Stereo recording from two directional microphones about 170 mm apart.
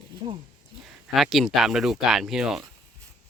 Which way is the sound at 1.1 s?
Centre (ahead or behind).